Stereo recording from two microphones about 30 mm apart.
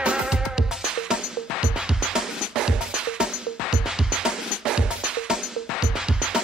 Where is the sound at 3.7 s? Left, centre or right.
Right.